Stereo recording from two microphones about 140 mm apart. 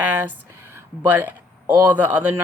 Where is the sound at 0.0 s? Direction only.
15° right (ahead or behind).